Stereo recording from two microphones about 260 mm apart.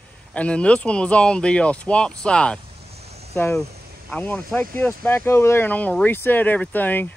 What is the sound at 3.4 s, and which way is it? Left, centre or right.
Speech, centre.